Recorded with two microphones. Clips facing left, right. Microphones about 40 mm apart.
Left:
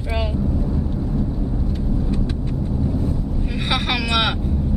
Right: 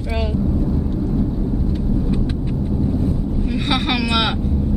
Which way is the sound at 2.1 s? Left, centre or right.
Centre.